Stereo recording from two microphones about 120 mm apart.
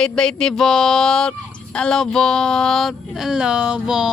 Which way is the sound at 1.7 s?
5° left (ahead or behind).